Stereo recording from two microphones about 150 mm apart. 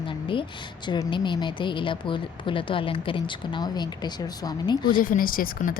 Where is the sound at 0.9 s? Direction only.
30° left (ahead or behind).